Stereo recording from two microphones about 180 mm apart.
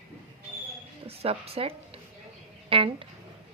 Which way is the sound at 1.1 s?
35° right (ahead or behind).